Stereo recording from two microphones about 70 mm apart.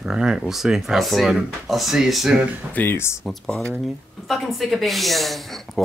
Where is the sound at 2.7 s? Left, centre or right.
Left.